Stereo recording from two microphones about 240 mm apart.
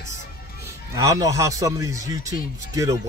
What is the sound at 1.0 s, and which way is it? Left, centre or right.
Speech, centre.